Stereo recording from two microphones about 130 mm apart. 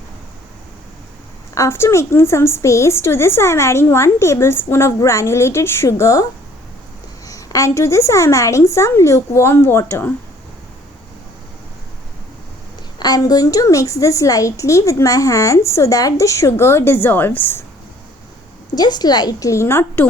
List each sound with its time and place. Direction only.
1.5 s a woman's voice: 20° left (ahead or behind)
7.3 s a woman's voice: 25° left (ahead or behind)
13.0 s a woman's voice: 30° left (ahead or behind)
18.7 s a woman's voice: 30° left (ahead or behind)